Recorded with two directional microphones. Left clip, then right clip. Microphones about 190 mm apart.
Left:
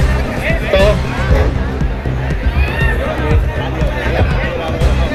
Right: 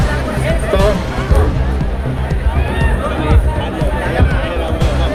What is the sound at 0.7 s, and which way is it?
Music, 65° right (ahead or behind).